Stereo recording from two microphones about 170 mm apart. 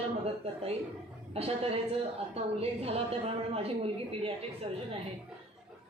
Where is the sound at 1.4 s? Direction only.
35° right (ahead or behind).